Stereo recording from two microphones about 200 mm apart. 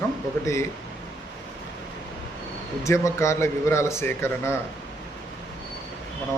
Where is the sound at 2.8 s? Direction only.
15° left (ahead or behind).